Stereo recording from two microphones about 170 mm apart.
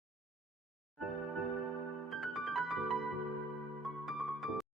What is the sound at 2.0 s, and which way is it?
Music, centre (ahead or behind).